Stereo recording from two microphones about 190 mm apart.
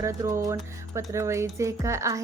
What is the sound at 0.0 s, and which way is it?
Speech, 15° right (ahead or behind).